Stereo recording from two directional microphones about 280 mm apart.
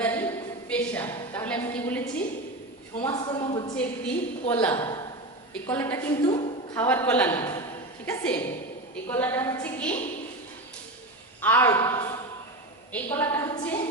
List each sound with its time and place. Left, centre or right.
0.0 s a sound: centre
3.0 s a woman's voice: centre
3.8 s a woman's voice: centre
4.7 s a man's voice: centre
6.2 s a woman's voice: centre
6.7 s a woman's voice: centre
11.3 s a woman's voice: centre